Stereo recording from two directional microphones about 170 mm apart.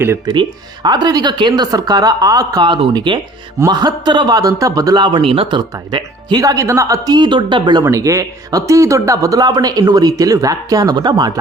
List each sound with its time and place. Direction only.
0.0 s speech: 15° right (ahead or behind)
0.3 s a man's voice: 25° right (ahead or behind)